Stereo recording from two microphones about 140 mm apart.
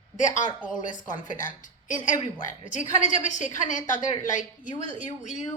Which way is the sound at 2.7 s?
60° left (ahead or behind).